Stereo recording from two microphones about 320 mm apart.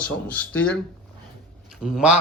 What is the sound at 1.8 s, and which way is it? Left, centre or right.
Speech, centre.